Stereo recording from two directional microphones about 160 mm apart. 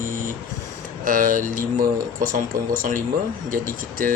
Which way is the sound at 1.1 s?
55° right (ahead or behind).